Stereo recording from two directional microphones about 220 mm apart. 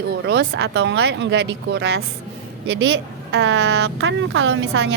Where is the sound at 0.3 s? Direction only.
50° right (ahead or behind).